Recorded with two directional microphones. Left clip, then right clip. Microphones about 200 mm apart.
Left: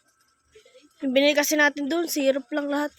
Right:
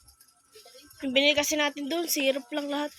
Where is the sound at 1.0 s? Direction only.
35° left (ahead or behind).